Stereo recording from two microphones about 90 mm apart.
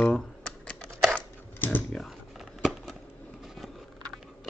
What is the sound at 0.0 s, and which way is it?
Camera, 5° left (ahead or behind).